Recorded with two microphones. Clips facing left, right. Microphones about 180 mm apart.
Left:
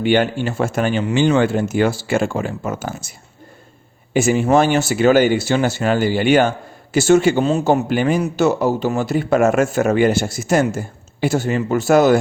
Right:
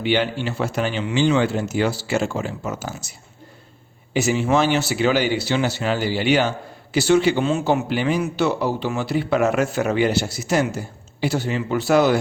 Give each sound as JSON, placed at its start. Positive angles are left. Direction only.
{"t": 0.0, "sound": "speech", "side_deg": 50}